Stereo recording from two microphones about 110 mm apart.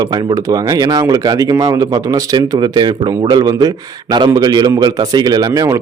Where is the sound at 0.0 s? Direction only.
35° right (ahead or behind).